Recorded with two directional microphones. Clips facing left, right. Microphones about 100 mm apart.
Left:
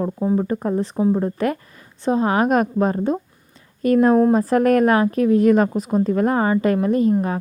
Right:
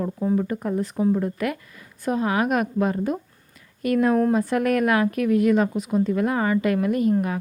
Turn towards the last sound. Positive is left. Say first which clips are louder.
# left 3 dB
turn(degrees=30)  # may be behind; listen again after turning